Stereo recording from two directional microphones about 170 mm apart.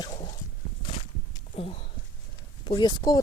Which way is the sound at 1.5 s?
35° left (ahead or behind).